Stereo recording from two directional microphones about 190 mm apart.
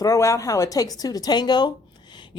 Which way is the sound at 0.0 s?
15° left (ahead or behind).